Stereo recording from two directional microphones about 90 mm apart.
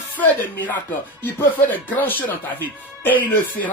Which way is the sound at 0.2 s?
20° left (ahead or behind).